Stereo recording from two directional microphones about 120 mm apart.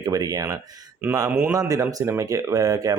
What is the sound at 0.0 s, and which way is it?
Speech, 35° right (ahead or behind).